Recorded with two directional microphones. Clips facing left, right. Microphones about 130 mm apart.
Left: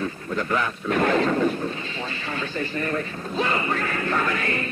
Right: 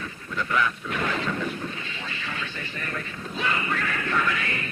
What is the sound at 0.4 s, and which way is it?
Speech, 40° left (ahead or behind).